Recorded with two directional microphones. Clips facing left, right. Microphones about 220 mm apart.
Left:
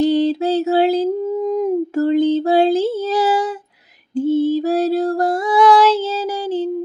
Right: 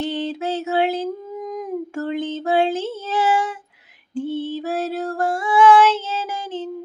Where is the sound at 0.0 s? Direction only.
35° left (ahead or behind).